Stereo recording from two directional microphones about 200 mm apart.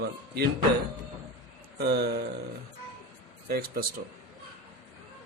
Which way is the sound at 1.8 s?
55° right (ahead or behind).